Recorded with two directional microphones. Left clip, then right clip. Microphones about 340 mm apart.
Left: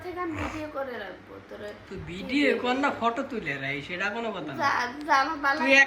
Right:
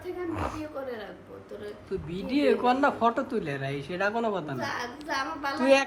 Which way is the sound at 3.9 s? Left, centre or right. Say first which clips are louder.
Right 6 dB; centre.